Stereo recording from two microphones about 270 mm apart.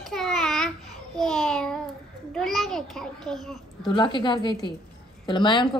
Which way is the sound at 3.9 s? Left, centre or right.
Centre.